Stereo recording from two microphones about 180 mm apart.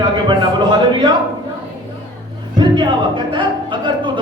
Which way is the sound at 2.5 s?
25° right (ahead or behind).